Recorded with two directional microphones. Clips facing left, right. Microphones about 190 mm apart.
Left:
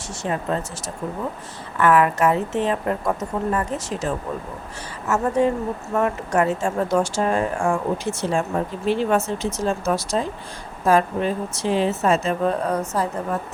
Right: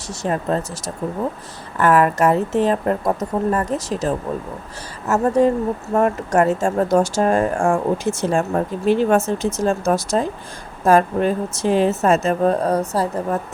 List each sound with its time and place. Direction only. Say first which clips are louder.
0.2 s a woman's voice: right 3 dB; 40° right (ahead or behind)
1.8 s a woman's voice: right 2 dB; 40° right (ahead or behind)